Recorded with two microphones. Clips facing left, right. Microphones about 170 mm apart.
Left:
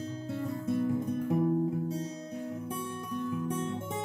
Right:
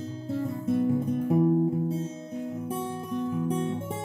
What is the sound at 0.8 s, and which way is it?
Guitar, 20° right (ahead or behind).